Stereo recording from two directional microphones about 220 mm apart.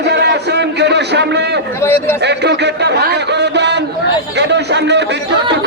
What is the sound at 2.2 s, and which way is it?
A man's voice, 50° right (ahead or behind).